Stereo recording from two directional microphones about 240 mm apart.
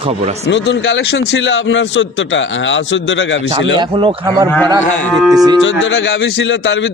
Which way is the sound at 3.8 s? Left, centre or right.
Centre.